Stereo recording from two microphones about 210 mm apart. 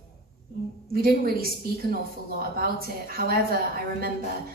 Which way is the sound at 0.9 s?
45° right (ahead or behind).